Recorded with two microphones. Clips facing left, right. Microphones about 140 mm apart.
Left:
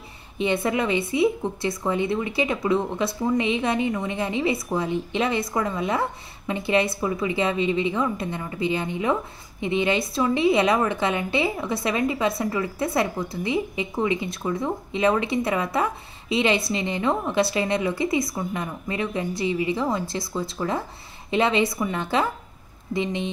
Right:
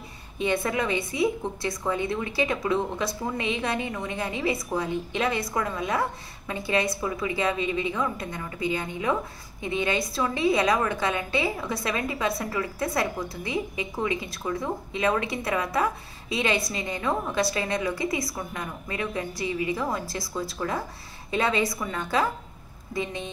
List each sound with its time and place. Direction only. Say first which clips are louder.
0.4 s a woman's voice: left 3 dB; 20° left (ahead or behind)